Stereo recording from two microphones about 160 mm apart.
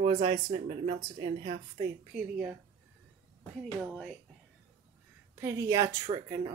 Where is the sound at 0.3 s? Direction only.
65° right (ahead or behind).